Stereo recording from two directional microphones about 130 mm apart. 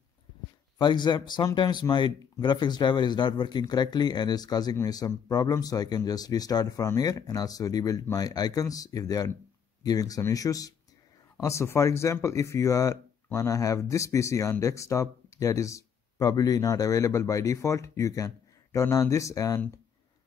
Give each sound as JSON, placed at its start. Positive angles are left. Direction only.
{"t": 0.7, "sound": "speech", "side_deg": 35}